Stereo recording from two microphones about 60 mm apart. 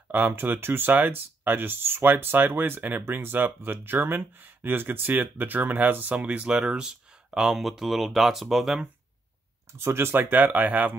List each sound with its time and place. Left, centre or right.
0.1 s speech: right
6.1 s speech: centre
9.8 s speech: right
10.3 s speech: right